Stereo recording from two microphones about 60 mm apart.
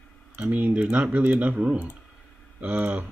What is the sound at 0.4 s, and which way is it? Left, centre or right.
Speech, right.